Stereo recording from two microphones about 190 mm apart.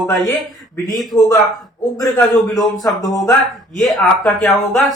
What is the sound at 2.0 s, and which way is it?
Speech, 20° left (ahead or behind).